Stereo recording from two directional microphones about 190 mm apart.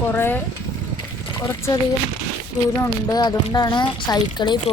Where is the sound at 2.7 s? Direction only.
20° left (ahead or behind).